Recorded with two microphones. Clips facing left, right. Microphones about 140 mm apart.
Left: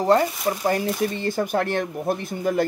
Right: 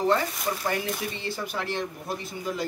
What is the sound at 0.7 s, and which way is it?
A man's voice, 45° left (ahead or behind).